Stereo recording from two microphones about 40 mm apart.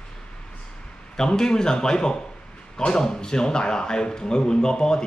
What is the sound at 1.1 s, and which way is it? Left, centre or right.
A man's voice, centre.